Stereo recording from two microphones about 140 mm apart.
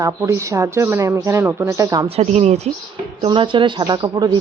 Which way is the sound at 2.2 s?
50° right (ahead or behind).